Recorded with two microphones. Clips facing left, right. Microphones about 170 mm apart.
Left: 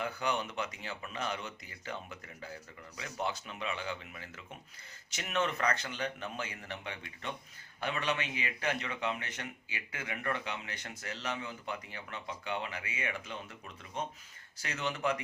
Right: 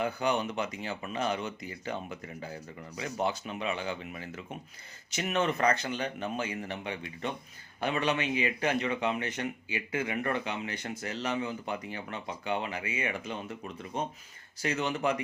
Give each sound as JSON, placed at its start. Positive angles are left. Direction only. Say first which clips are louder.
{"t": 0.0, "sound": "a man's voice", "louder": "right 5 dB", "side_deg": -15}
{"t": 14.6, "sound": "speech", "louder": "right 5 dB", "side_deg": -15}